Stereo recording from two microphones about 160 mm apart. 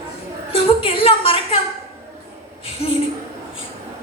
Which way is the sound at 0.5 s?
35° left (ahead or behind).